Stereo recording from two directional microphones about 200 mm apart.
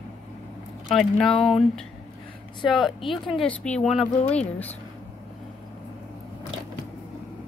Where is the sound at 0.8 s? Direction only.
Centre (ahead or behind).